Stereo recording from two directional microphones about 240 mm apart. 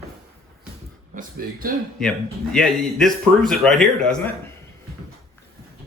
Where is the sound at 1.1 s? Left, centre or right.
Right.